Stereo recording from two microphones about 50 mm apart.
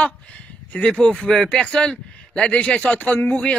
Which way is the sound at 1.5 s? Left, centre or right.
Left.